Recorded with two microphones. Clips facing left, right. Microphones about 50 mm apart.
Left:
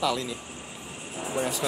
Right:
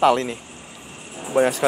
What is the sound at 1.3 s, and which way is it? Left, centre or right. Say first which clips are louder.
Speech: right 11 dB; right.